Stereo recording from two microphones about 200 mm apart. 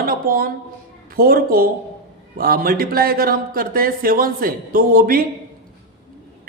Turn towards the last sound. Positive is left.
turn(degrees=-45)  # may be behind; listen again after turning